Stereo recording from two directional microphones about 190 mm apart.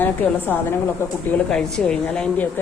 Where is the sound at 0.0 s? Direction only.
10° left (ahead or behind).